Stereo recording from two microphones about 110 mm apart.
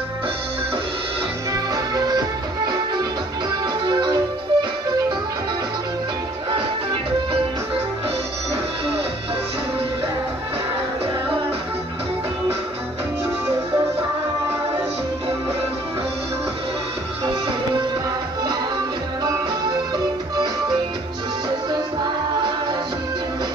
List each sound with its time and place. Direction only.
1.5 s music: 35° right (ahead or behind)
17.2 s music: 45° right (ahead or behind)
22.0 s music: 40° right (ahead or behind)